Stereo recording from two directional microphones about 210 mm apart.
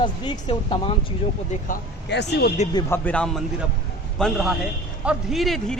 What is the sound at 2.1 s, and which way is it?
Speech, 55° left (ahead or behind).